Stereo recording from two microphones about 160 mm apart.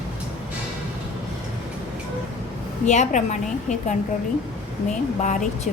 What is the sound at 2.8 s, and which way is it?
Speech, 50° left (ahead or behind).